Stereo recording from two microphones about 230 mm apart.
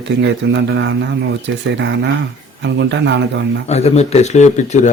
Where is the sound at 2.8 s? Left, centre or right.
Right.